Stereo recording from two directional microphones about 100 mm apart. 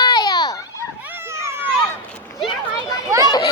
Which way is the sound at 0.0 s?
45° left (ahead or behind).